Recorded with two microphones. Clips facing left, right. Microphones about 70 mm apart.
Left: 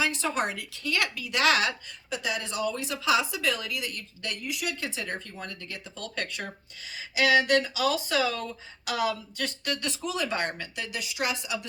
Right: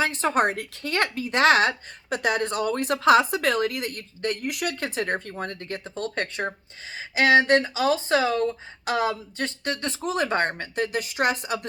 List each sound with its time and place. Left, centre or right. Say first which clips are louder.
0.0 s speech: right 6 dB; right
4.4 s speech: right 5 dB; right